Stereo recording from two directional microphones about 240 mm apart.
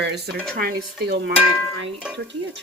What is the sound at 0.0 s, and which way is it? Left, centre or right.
Speech, right.